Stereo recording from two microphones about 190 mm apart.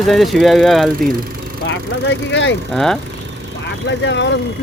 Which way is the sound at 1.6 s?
75° left (ahead or behind).